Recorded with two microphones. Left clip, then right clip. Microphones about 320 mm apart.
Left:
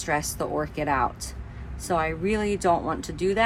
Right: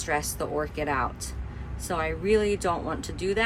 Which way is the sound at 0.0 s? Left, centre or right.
Centre.